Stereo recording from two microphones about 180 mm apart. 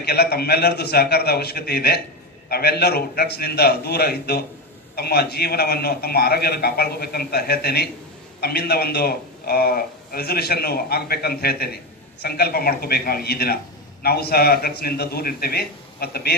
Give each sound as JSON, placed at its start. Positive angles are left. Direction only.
{"t": 0.0, "sound": "a man's voice", "side_deg": 60}